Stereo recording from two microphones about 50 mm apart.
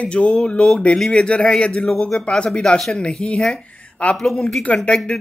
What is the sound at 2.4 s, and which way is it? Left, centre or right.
Speech, left.